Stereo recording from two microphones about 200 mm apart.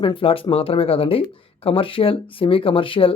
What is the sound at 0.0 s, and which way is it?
Speech, 25° left (ahead or behind).